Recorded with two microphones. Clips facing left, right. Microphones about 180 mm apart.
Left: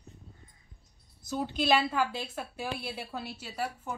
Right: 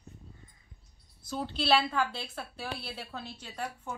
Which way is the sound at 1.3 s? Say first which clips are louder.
Left 1 dB; 10° left (ahead or behind).